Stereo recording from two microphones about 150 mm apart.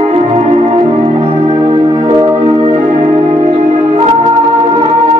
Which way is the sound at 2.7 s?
50° right (ahead or behind).